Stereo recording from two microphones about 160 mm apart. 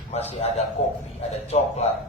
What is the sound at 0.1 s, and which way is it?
A man's voice, 40° left (ahead or behind).